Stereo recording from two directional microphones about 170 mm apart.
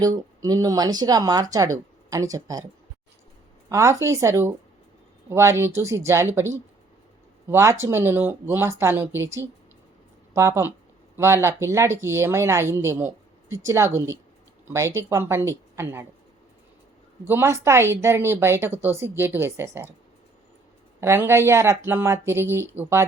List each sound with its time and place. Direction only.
0.0 s speech: 20° right (ahead or behind)
3.7 s speech: 15° right (ahead or behind)
17.2 s speech: 15° right (ahead or behind)
21.0 s speech: 15° right (ahead or behind)